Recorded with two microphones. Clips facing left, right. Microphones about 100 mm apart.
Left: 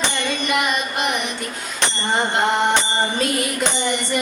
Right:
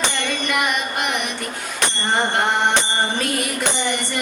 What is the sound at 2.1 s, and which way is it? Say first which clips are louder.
Music: left 1 dB; 20° left (ahead or behind).